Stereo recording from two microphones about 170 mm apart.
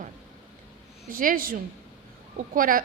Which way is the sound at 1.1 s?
55° right (ahead or behind).